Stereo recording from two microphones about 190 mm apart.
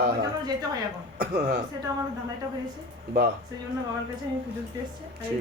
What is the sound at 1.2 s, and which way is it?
Speech, 55° right (ahead or behind).